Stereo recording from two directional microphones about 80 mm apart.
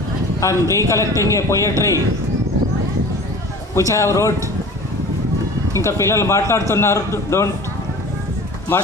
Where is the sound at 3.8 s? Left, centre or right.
Left.